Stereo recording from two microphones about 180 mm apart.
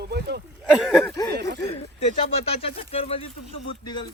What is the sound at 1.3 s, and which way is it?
Speech, 70° right (ahead or behind).